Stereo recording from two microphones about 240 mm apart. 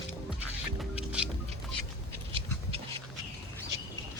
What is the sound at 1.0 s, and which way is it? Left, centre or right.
Music, centre.